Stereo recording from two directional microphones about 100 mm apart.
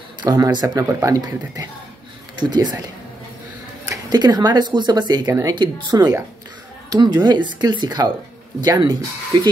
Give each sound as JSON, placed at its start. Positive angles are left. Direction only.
{"t": 0.2, "sound": "speech", "side_deg": -40}
{"t": 2.3, "sound": "speech", "side_deg": -45}
{"t": 3.9, "sound": "speech", "side_deg": -40}
{"t": 5.2, "sound": "speech", "side_deg": -25}
{"t": 5.5, "sound": "speech", "side_deg": -50}